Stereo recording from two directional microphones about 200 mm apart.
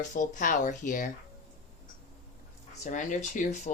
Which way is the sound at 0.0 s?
40° left (ahead or behind).